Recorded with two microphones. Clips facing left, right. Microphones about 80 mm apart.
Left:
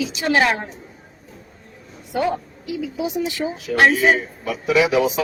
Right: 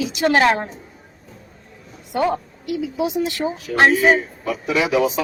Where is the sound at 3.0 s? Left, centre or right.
Right.